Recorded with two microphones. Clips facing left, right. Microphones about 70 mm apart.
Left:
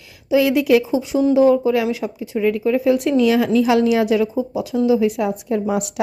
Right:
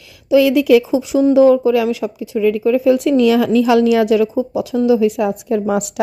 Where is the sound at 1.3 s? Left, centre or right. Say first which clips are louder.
Right 4 dB; right.